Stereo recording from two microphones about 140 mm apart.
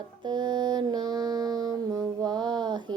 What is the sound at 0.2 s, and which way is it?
Mantra, 30° right (ahead or behind).